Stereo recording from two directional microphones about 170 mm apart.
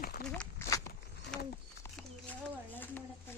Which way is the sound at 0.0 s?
60° left (ahead or behind).